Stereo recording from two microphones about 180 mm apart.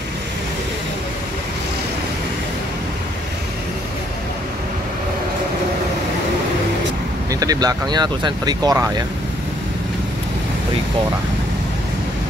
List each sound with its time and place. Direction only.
7.2 s speech: 20° right (ahead or behind)